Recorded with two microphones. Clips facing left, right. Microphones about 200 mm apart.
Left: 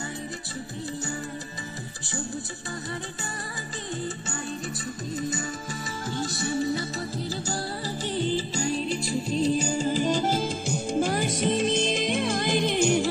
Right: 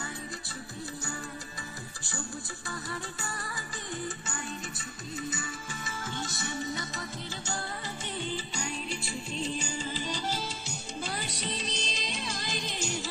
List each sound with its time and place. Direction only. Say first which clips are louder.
6.0 s music: left 9 dB; 35° left (ahead or behind); by 13.1 s 60° left (ahead or behind)